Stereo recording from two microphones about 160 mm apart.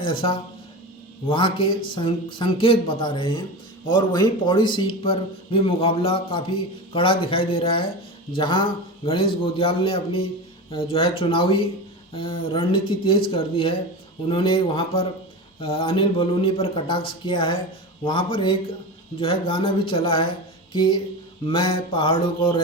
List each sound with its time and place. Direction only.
0.0 s a man's voice: 35° left (ahead or behind)
20.7 s a sound: 30° left (ahead or behind)
21.4 s a man's voice: 30° left (ahead or behind)